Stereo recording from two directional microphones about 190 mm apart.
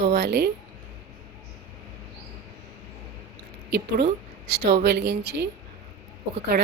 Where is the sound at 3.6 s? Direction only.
60° right (ahead or behind).